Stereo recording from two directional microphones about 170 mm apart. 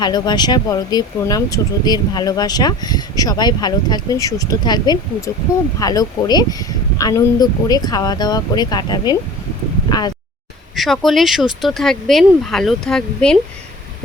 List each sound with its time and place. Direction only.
0.0 s speech: 25° left (ahead or behind)
10.8 s speech: centre (ahead or behind)